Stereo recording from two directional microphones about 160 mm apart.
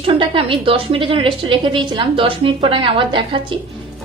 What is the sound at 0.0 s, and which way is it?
A woman's voice, 35° right (ahead or behind).